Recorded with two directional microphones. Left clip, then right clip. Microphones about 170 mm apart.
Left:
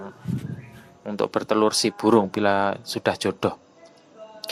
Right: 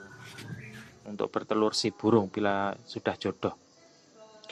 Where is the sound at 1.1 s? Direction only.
30° left (ahead or behind).